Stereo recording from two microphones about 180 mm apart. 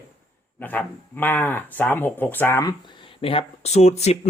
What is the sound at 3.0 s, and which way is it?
Speech, 30° left (ahead or behind).